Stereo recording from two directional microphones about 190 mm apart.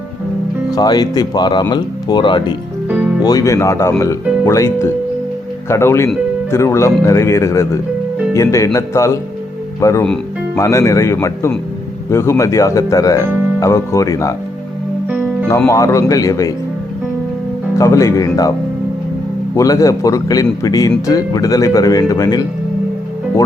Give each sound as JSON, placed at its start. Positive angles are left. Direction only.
{"t": 0.8, "sound": "speech", "side_deg": 20}
{"t": 15.4, "sound": "speech", "side_deg": 15}
{"t": 17.7, "sound": "speech", "side_deg": 15}
{"t": 19.5, "sound": "speech", "side_deg": 20}